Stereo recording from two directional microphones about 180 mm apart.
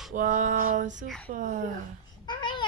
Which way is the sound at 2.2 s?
25° left (ahead or behind).